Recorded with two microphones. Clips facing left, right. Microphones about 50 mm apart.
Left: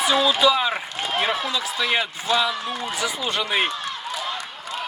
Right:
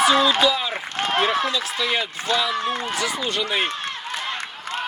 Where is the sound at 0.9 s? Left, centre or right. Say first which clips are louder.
Right 3 dB; right.